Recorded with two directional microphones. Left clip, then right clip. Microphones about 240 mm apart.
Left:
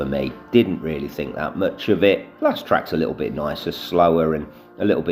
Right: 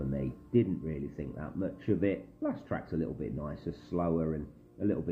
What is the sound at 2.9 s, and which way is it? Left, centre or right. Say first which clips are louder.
Speech: left 14 dB; left.